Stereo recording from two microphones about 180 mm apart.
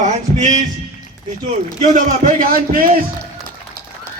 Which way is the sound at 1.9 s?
50° right (ahead or behind).